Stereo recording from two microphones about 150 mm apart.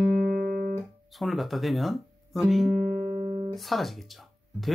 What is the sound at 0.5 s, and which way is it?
Guitar, 90° right.